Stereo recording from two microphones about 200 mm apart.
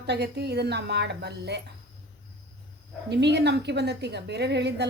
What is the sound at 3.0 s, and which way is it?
A woman's voice, 55° right (ahead or behind).